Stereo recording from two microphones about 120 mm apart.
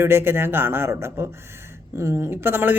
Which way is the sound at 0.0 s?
20° right (ahead or behind).